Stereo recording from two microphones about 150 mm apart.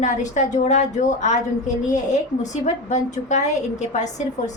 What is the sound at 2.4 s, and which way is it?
A woman's voice, 55° left (ahead or behind).